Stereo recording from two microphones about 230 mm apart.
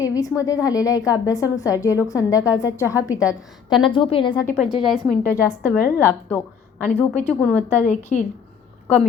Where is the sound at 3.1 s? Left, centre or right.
Centre.